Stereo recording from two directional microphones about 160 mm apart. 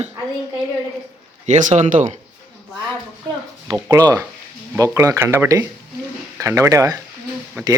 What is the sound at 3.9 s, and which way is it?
Speech, 20° right (ahead or behind).